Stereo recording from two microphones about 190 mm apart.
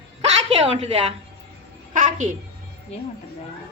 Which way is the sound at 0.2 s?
35° right (ahead or behind).